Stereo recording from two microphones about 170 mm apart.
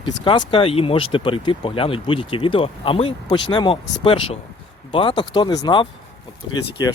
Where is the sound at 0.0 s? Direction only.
30° left (ahead or behind).